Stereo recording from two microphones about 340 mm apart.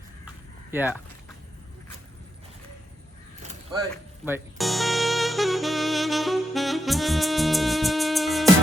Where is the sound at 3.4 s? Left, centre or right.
Centre.